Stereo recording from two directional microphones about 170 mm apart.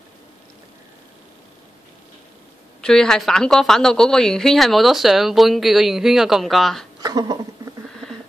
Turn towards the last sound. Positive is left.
turn(degrees=-20)  # may be behind; listen again after turning